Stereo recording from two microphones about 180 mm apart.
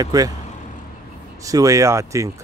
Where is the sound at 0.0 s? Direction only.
20° right (ahead or behind).